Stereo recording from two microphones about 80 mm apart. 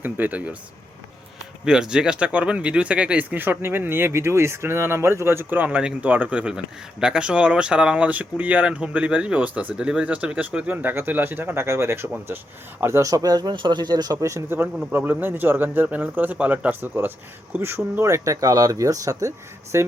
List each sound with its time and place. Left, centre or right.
0.0 s speech: right
1.6 s speech: centre; by 14.4 s right
14.9 s speech: right
18.0 s speech: right